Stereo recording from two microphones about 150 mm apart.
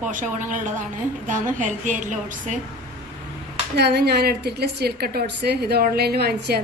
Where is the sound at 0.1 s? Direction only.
60° right (ahead or behind).